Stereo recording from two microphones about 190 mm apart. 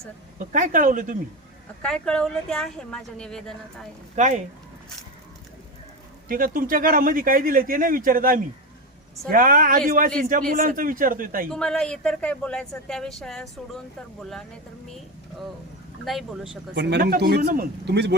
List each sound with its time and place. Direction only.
0.3 s speech: 45° right (ahead or behind)
1.8 s a woman's voice: 5° left (ahead or behind)
4.1 s speech: 40° right (ahead or behind)
6.2 s speech: 50° right (ahead or behind)
11.5 s a woman's voice: 5° left (ahead or behind)
16.0 s a woman's voice: centre (ahead or behind)
17.0 s a man's voice: 50° right (ahead or behind)